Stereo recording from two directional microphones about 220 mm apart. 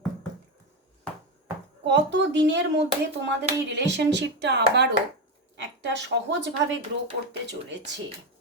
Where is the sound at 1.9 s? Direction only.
55° right (ahead or behind).